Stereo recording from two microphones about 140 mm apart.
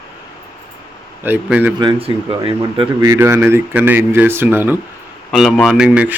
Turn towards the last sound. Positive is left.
turn(degrees=-10)  # may be behind; listen again after turning